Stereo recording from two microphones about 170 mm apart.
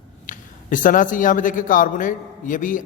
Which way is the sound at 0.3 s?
50° left (ahead or behind).